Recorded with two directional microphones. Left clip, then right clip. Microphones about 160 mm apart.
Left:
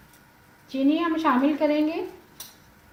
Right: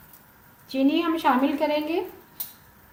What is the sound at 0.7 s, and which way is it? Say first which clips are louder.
A woman's voice: even; 60° right (ahead or behind).